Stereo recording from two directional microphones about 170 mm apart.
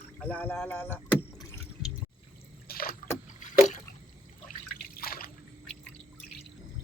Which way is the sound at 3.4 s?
50° left (ahead or behind).